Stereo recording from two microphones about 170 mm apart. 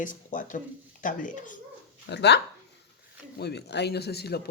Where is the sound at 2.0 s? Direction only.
85° left.